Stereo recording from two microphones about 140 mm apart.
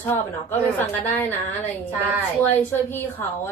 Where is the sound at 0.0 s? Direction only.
15° left (ahead or behind).